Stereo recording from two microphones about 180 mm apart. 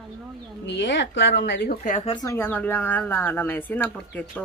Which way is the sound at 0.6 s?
85° left.